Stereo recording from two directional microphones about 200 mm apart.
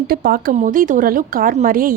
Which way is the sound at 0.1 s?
45° right (ahead or behind).